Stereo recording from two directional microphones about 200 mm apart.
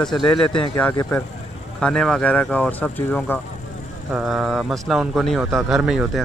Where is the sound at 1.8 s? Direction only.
5° left (ahead or behind).